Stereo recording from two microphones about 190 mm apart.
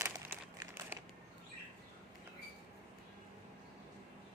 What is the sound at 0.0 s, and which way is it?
Crumpling, 15° right (ahead or behind).